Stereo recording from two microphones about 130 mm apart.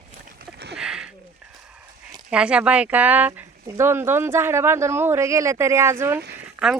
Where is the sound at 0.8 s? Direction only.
5° right (ahead or behind).